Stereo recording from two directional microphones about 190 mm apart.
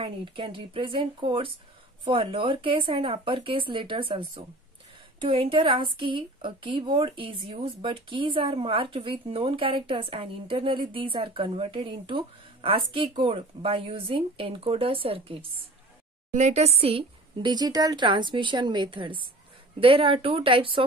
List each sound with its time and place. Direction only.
0.0 s a woman's voice: 30° right (ahead or behind)